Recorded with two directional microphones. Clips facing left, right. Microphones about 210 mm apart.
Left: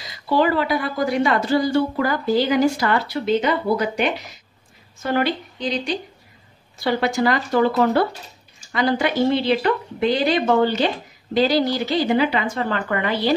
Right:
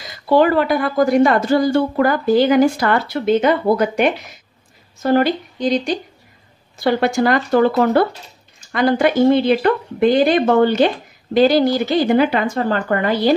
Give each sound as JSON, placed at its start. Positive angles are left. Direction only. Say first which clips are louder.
{"t": 0.0, "sound": "a woman's voice", "louder": "right 5 dB", "side_deg": -50}
{"t": 5.0, "sound": "a woman's voice", "louder": "right 6 dB", "side_deg": -40}